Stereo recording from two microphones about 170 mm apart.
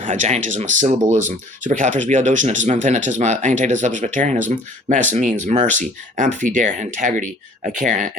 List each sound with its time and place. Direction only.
0.0 s speech: 45° right (ahead or behind)